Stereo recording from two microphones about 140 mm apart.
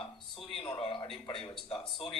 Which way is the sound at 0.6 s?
40° left (ahead or behind).